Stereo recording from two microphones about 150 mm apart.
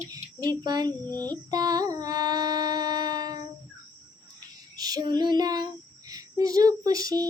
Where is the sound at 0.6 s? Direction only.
25° right (ahead or behind).